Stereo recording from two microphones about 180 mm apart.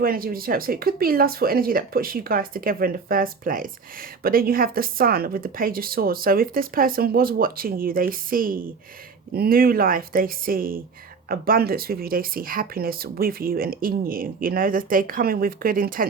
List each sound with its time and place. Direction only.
0.0 s speech: 55° right (ahead or behind)